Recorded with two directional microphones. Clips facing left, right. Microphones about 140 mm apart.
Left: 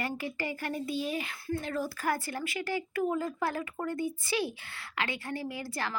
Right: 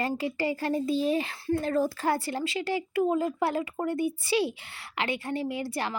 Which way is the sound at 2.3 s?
20° right (ahead or behind).